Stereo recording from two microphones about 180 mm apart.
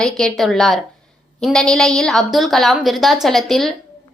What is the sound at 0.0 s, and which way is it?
A woman's voice, centre (ahead or behind).